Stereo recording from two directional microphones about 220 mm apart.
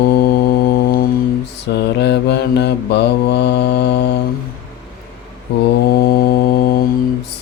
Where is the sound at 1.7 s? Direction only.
50° left (ahead or behind).